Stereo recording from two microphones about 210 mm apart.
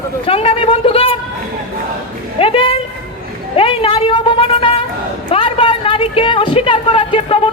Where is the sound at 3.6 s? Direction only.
25° left (ahead or behind).